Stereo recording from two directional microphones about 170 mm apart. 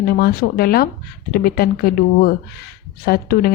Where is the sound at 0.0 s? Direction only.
65° left (ahead or behind).